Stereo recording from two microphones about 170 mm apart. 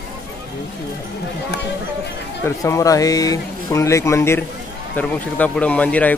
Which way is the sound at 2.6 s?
20° left (ahead or behind).